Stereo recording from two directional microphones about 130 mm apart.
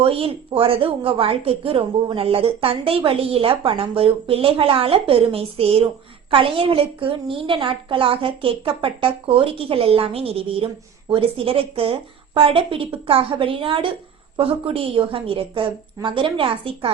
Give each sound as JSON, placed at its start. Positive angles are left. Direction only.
{"t": 0.0, "sound": "a woman's voice", "side_deg": -45}